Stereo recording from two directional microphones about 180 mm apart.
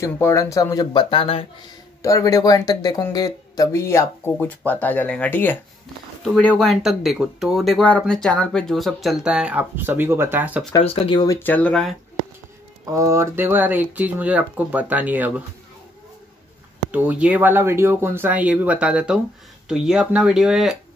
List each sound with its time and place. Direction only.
0.0 s speech: 15° left (ahead or behind)
2.0 s speech: 20° left (ahead or behind); by 10.6 s 10° right (ahead or behind)
10.8 s speech: 35° left (ahead or behind); by 11.9 s 5° left (ahead or behind)
12.9 s speech: 15° right (ahead or behind)
16.9 s speech: 10° right (ahead or behind)